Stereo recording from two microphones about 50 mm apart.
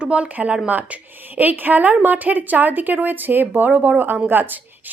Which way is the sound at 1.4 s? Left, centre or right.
Right.